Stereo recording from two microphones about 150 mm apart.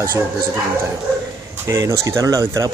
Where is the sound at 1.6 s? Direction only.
20° right (ahead or behind).